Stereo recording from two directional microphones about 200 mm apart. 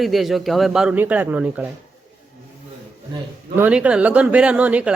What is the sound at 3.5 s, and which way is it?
Speech, 10° right (ahead or behind).